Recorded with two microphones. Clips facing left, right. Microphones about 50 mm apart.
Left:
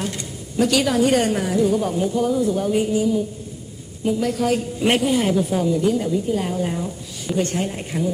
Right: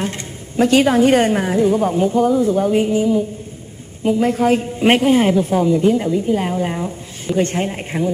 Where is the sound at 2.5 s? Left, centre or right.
Right.